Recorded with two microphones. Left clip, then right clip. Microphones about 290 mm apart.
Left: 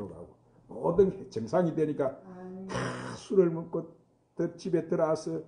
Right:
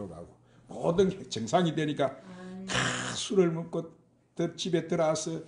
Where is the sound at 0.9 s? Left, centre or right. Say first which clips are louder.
Left 2 dB; right.